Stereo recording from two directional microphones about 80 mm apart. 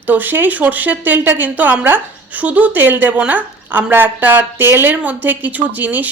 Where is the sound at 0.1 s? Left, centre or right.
Right.